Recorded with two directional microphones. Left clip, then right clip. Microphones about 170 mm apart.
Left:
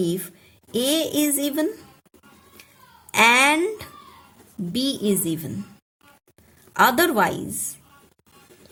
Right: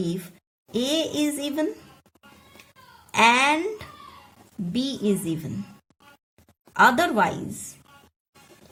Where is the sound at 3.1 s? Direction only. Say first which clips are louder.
Left 2 dB; 35° left (ahead or behind).